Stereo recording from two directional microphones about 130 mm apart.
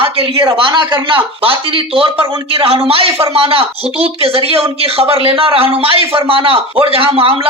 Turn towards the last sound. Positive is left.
turn(degrees=-45)  # may be behind; listen again after turning